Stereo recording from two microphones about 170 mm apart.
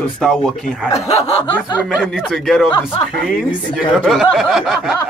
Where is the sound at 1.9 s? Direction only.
5° right (ahead or behind).